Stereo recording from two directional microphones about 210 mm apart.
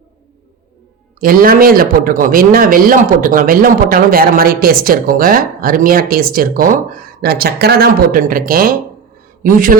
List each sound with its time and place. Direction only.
1.2 s a man's voice: 45° right (ahead or behind)